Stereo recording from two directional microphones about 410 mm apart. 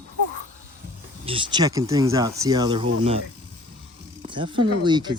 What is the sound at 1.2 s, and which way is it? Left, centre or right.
Speech, centre.